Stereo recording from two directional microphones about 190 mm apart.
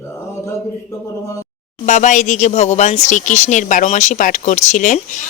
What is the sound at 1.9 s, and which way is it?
Speech, 40° left (ahead or behind).